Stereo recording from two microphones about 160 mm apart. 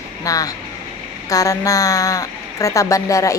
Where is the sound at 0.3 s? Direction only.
20° left (ahead or behind).